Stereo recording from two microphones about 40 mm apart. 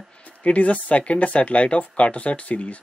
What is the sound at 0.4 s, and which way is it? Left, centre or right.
Speech, left.